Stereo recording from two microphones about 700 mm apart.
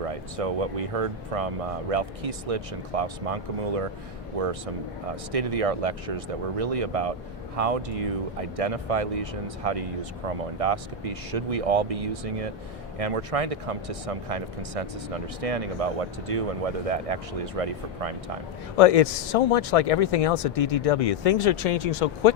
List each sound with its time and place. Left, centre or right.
0.3 s speech: right
4.4 s speech: right
18.8 s speech: left